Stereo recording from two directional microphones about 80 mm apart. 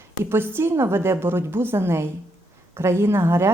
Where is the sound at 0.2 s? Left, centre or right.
Right.